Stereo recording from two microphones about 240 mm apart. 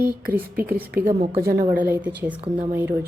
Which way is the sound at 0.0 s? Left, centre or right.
Right.